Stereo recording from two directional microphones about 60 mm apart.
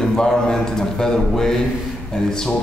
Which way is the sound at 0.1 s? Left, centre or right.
Centre.